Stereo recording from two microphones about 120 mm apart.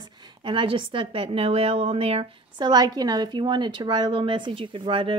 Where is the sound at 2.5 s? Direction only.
35° right (ahead or behind).